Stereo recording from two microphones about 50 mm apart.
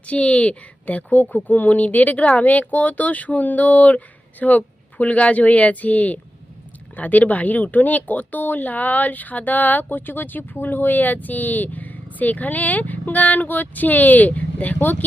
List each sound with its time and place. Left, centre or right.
0.0 s a woman's voice: left